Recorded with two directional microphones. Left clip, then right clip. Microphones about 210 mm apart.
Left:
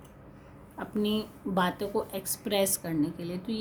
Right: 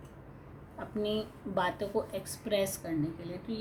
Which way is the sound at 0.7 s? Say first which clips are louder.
Left 2 dB; 35° left (ahead or behind).